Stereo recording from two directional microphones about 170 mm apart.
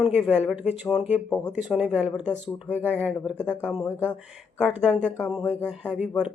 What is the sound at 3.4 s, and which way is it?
Speech, 5° left (ahead or behind).